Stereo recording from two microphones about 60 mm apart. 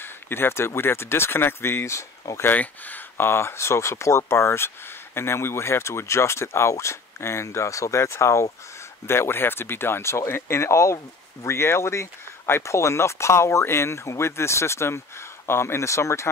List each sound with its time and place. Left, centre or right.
0.0 s speech: left
2.4 s speech: left
3.2 s speech: left
9.0 s speech: left